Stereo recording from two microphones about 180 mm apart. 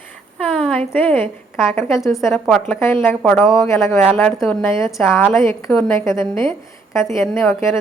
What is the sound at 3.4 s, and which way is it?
Speech, centre (ahead or behind).